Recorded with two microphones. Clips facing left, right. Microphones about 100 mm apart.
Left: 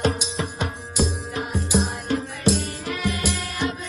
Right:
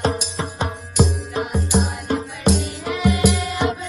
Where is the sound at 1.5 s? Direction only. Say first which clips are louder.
Right 1 dB; centre (ahead or behind).